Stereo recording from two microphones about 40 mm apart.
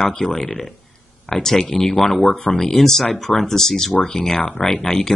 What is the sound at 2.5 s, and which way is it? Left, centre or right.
Speech, centre.